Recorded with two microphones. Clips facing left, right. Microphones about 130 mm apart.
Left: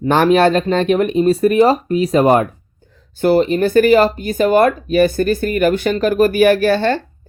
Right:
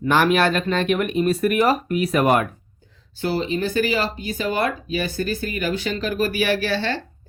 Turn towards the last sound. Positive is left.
turn(degrees=50)  # may be behind; listen again after turning